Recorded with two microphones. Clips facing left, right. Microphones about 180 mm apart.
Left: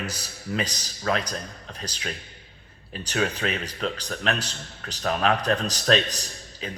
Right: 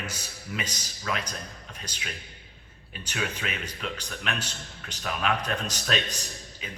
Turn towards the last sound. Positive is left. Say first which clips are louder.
# left 3 dB
turn(degrees=35)  # may be behind; listen again after turning